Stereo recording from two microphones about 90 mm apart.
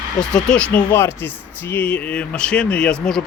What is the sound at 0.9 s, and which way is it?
Speech, 25° left (ahead or behind).